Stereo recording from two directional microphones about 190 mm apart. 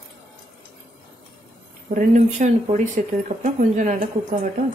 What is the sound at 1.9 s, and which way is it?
A woman's voice, 40° right (ahead or behind).